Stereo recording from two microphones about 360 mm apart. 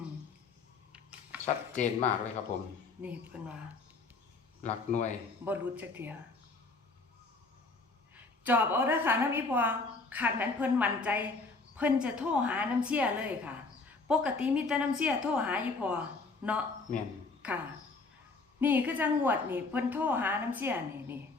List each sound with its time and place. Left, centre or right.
1.7 s a man's voice: centre
3.0 s a woman's voice: centre
4.6 s a man's voice: centre
5.5 s a woman's voice: centre
8.1 s a woman's voice: centre
18.6 s a woman's voice: centre